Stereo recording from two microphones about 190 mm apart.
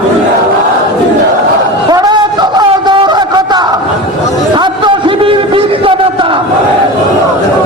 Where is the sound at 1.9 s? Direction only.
20° right (ahead or behind).